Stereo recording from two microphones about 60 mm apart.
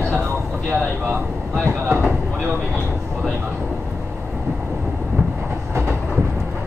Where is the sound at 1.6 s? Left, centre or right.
Right.